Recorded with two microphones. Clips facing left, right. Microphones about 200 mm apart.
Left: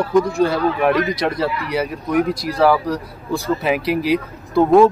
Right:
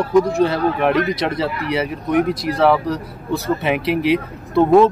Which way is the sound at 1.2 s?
Centre (ahead or behind).